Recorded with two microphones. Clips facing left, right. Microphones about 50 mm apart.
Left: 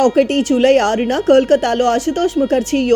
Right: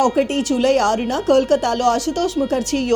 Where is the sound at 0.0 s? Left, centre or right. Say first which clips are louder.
Left 4 dB; left.